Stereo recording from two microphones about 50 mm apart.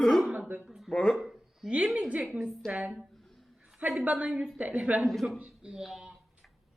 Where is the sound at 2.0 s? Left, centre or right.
Right.